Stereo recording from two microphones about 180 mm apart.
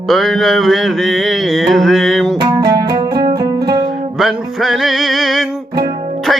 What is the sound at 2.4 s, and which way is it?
Music, 20° right (ahead or behind).